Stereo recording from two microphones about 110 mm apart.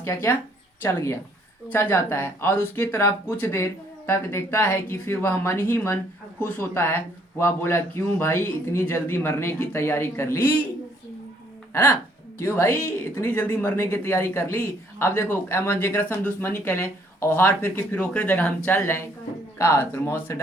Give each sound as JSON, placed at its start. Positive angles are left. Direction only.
{"t": 0.0, "sound": "speech", "side_deg": 25}
{"t": 11.7, "sound": "speech", "side_deg": 25}